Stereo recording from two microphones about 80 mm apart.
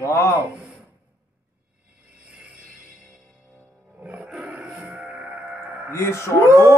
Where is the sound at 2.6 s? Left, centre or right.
Centre.